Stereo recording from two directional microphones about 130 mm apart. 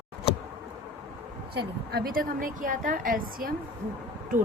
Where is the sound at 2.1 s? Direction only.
90° right.